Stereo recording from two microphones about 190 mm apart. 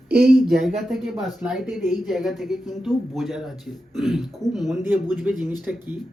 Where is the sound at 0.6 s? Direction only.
Centre (ahead or behind).